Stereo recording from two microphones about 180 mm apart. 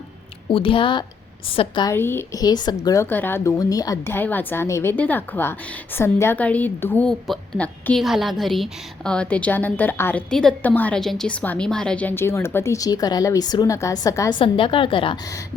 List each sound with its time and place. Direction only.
0.5 s speech: 30° left (ahead or behind)
1.9 s speech: 10° left (ahead or behind)